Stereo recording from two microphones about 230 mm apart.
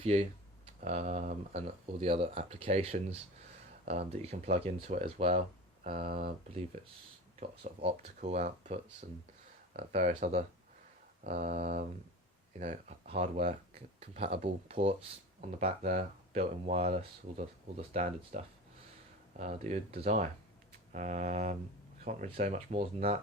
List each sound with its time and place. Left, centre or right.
0.0 s speech: right
7.4 s speech: right
9.0 s mantra: right
9.7 s speech: right
11.2 s mantra: right
12.5 s speech: right
20.0 s mantra: right
22.0 s speech: right